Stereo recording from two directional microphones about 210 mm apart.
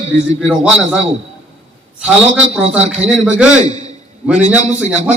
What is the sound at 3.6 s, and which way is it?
Speech, 35° right (ahead or behind).